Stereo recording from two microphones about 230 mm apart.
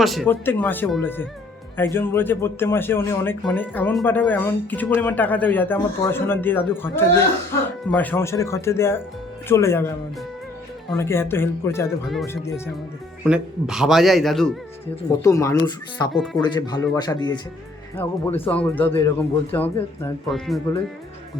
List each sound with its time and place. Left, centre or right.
0.0 s a man's voice: centre
7.9 s a man's voice: centre
10.9 s a man's voice: centre
13.2 s a man's voice: centre
15.2 s a man's voice: centre
16.1 s a man's voice: centre
16.4 s a man's voice: centre